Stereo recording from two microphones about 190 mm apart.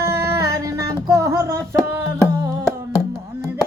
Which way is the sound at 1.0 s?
15° right (ahead or behind).